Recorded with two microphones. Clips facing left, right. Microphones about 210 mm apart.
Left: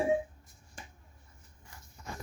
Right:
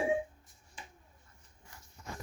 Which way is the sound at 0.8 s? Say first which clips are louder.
Left 1 dB; 45° left (ahead or behind).